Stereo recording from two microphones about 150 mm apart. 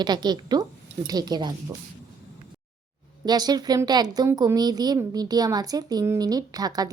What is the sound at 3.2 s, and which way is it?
Speech, 25° right (ahead or behind).